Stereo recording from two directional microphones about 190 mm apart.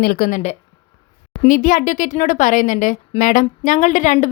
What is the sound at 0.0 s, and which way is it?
A woman's voice, 50° left (ahead or behind).